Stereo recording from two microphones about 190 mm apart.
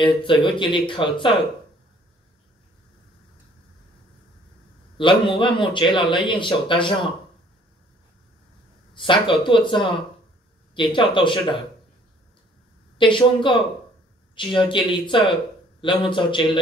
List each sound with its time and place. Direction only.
0.0 s a man's voice: 25° left (ahead or behind)
4.9 s a man's voice: 25° left (ahead or behind)
8.9 s a man's voice: 25° left (ahead or behind)
12.9 s a man's voice: 25° left (ahead or behind)